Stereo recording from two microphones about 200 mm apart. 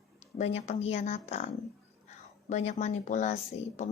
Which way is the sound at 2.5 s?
35° left (ahead or behind).